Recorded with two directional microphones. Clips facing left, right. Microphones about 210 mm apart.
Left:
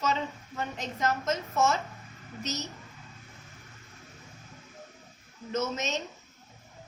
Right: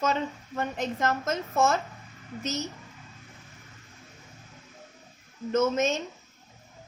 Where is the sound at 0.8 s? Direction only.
50° right (ahead or behind).